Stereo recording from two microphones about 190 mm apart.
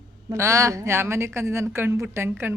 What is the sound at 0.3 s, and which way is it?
A woman's voice, 15° right (ahead or behind).